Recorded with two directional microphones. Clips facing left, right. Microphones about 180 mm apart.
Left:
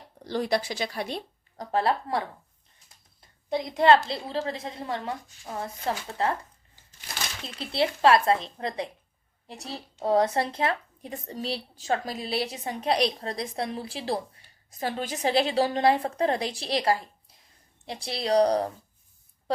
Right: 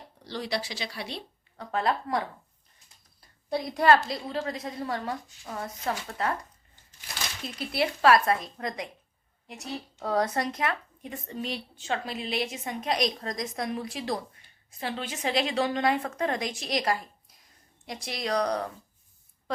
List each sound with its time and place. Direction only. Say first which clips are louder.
0.3 s speech: left 6 dB; 50° left (ahead or behind)
1.7 s a woman's voice: left 2 dB; 30° left (ahead or behind)
3.2 s a woman's voice: left 1 dB; 20° left (ahead or behind)
7.4 s a woman's voice: left 2 dB; 25° left (ahead or behind)